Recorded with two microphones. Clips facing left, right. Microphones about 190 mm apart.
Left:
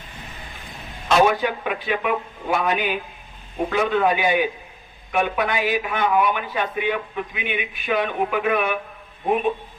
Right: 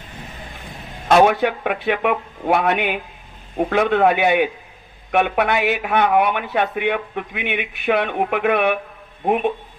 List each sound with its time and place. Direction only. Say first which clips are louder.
1.0 s a man's voice: right 4 dB; 60° right (ahead or behind)